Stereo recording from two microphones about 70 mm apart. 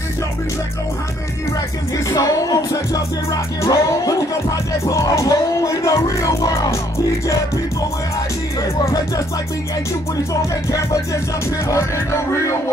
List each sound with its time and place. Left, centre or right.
2.0 s music: left
5.1 s speech: left